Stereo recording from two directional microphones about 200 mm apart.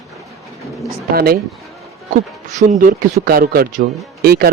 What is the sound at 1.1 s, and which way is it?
Speech, 50° right (ahead or behind).